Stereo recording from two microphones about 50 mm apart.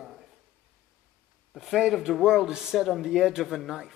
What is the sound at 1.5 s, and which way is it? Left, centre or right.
A man's voice, centre.